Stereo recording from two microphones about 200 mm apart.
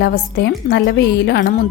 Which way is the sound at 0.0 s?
50° left (ahead or behind).